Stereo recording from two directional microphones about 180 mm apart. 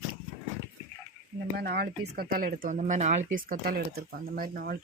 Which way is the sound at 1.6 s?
60° right (ahead or behind).